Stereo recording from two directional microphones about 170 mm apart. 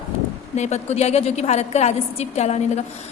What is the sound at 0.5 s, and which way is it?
A woman's voice, 40° left (ahead or behind).